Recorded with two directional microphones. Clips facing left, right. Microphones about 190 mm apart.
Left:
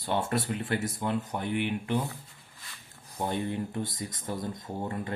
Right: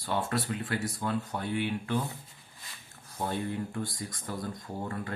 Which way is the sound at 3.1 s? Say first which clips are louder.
Left 2 dB; 20° left (ahead or behind).